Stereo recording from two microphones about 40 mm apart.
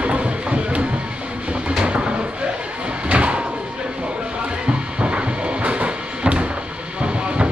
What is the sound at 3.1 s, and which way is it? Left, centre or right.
Music, right.